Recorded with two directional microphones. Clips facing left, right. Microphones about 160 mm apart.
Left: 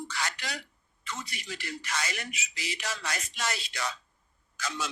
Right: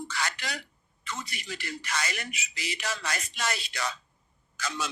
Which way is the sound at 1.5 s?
55° right (ahead or behind).